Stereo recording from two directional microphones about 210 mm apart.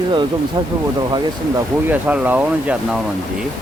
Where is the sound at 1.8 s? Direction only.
5° right (ahead or behind).